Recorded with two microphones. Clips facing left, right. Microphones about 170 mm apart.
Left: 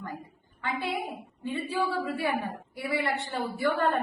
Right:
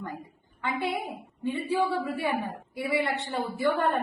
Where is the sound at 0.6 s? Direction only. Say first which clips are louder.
Right 2 dB; 20° right (ahead or behind).